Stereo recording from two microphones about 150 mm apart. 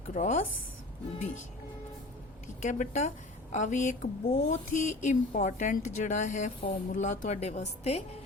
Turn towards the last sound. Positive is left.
turn(degrees=45)  # may be behind; listen again after turning